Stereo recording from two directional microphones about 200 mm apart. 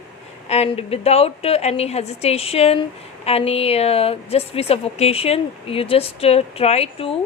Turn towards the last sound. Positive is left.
turn(degrees=30)  # may be behind; listen again after turning